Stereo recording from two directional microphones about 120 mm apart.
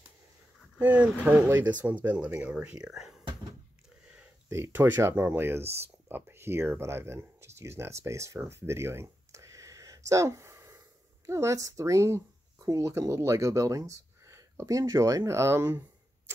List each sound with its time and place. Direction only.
0.7 s speech: 10° right (ahead or behind)
4.5 s speech: 20° right (ahead or behind)